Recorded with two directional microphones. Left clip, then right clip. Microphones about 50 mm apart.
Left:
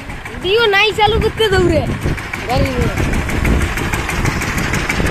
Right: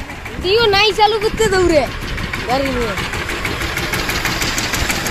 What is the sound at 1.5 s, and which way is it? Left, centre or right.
Speech, left.